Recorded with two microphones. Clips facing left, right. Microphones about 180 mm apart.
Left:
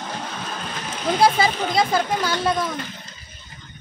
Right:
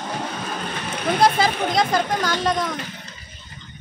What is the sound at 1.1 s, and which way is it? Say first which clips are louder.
A woman's voice: even; centre (ahead or behind).